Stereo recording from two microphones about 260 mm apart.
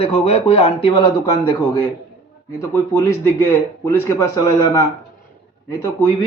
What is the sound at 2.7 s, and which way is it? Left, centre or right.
Speech, centre.